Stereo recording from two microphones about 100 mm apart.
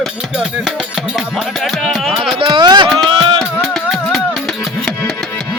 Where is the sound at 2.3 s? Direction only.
50° right (ahead or behind).